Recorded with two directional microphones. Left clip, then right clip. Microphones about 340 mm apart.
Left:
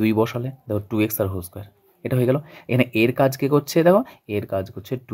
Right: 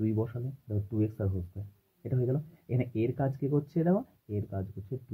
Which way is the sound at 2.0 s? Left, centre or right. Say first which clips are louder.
Left 13 dB; left.